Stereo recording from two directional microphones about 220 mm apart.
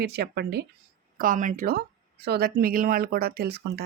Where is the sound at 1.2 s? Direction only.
35° right (ahead or behind).